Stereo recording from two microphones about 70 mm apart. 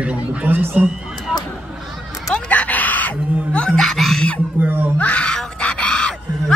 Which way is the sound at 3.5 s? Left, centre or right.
Centre.